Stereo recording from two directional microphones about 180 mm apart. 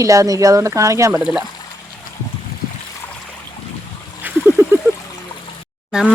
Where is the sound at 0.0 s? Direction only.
20° right (ahead or behind).